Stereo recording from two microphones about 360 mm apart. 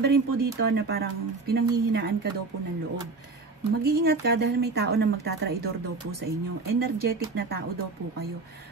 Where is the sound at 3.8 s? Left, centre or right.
Right.